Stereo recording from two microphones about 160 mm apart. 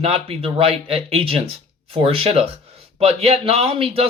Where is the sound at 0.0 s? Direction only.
35° right (ahead or behind).